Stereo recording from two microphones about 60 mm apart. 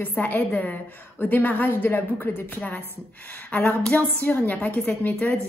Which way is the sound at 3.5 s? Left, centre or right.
Left.